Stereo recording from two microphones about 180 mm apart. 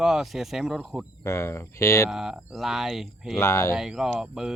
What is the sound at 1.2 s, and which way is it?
Speech, 15° left (ahead or behind).